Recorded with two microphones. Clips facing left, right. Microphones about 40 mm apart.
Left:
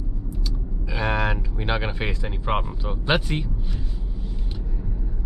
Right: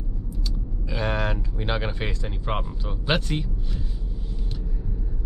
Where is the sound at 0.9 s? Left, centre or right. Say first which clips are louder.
Left 2 dB; centre.